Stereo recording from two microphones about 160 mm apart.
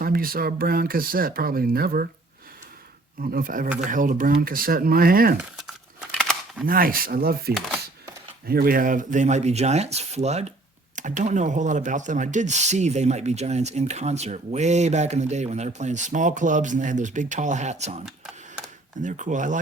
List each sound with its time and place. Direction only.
0.0 s speech: 65° right (ahead or behind)
3.2 s speech: 60° right (ahead or behind)
5.4 s a sound: 5° right (ahead or behind)
6.7 s speech: 60° right (ahead or behind); by 18.0 s 45° right (ahead or behind)
19.0 s speech: 50° right (ahead or behind)